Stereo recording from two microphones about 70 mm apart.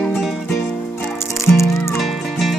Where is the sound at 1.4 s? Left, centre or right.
Left.